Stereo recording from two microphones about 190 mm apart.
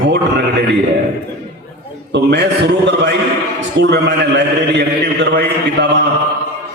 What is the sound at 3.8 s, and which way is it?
Speech, 65° right (ahead or behind).